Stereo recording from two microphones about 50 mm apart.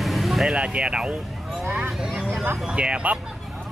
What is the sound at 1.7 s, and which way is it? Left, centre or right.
Speech, right.